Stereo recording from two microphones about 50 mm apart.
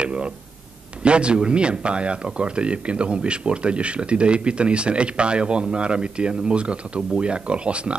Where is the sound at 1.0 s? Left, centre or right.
Right.